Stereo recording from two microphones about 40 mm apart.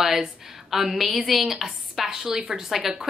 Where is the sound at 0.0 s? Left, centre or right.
Centre.